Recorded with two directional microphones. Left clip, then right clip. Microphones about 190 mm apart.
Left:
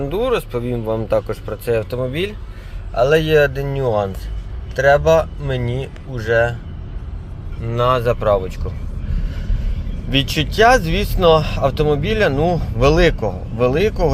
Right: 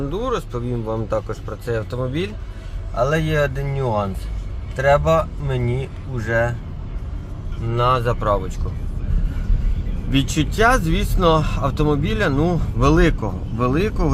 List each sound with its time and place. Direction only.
0.1 s speech: 10° left (ahead or behind)
7.8 s speech: centre (ahead or behind)
10.1 s speech: 5° left (ahead or behind)